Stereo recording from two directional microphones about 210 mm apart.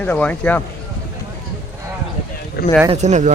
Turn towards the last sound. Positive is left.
turn(degrees=-35)  # may be behind; listen again after turning